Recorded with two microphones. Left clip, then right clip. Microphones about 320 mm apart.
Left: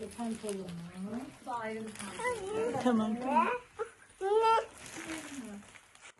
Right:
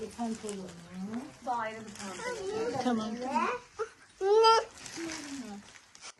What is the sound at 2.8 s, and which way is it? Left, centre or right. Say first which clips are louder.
Speech: left 2 dB; left.